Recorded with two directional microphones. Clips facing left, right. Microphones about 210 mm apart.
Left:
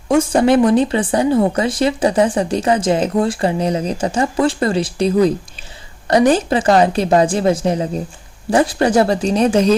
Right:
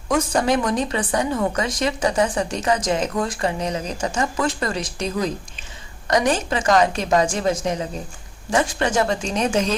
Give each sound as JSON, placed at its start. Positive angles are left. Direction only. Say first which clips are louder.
{"t": 0.1, "sound": "a woman's voice", "louder": "left 7 dB", "side_deg": 30}